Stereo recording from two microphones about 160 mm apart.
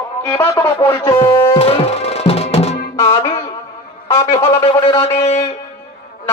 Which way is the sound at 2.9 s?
20° left (ahead or behind).